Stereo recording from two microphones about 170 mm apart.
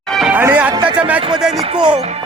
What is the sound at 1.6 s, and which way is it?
Music, 30° right (ahead or behind).